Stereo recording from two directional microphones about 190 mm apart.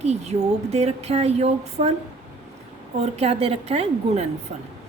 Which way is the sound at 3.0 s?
35° right (ahead or behind).